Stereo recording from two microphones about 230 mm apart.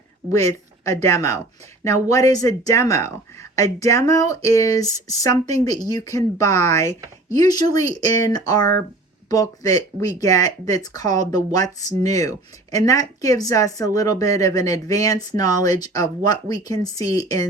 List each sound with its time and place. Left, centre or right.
1.0 s speech: centre